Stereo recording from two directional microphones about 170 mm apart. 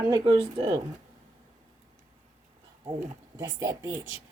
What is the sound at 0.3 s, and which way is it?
Speech, 25° right (ahead or behind).